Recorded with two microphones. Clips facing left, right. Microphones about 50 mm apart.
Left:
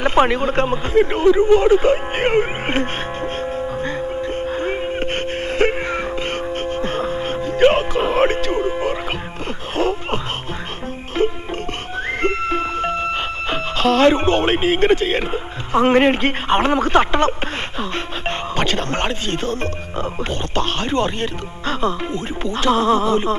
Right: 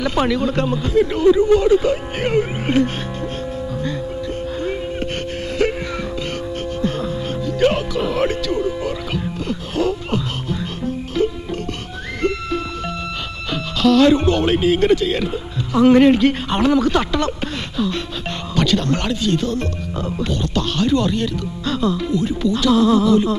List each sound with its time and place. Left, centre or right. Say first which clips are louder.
0.0 s speech: left 2 dB; left
4.6 s music: left 2 dB; left
6.8 s music: left 1 dB; left
9.8 s a sound: even; left
11.2 s music: left 1 dB; left
13.5 s speech: right 2 dB; left